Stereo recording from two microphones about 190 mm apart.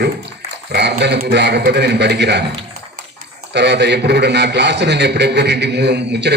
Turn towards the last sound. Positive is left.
turn(degrees=-65)  # may be behind; listen again after turning